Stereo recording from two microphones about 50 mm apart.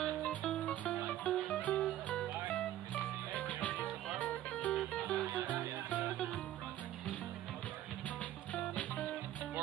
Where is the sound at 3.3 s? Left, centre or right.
Left.